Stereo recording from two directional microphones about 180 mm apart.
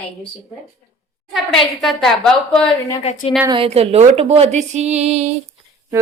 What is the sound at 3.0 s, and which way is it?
Speech, 35° left (ahead or behind).